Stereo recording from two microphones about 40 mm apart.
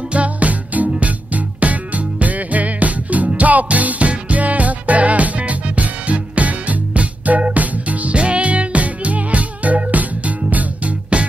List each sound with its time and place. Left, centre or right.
0.1 s music: right